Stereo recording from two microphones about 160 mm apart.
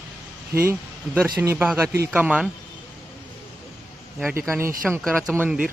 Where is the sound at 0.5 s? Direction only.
10° right (ahead or behind).